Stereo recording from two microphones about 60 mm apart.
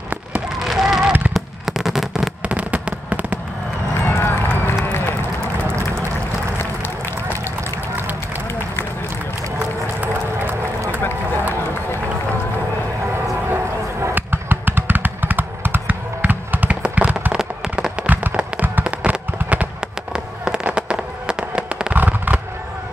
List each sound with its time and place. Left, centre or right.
0.7 s fireworks: centre
2.4 s fireworks: right
4.0 s run: left
9.6 s crowd: right
14.1 s a sound: right
16.8 s tap: right
18.0 s fireworks: right
21.9 s fireworks: right